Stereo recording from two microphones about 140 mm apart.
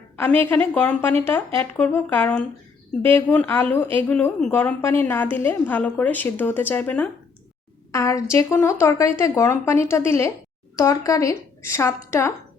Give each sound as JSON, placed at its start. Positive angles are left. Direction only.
{"t": 0.2, "sound": "a woman's voice", "side_deg": 15}
{"t": 7.9, "sound": "a woman's voice", "side_deg": 20}